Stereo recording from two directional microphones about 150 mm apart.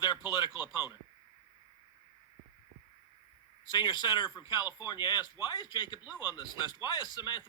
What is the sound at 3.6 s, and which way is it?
Speech, 30° left (ahead or behind).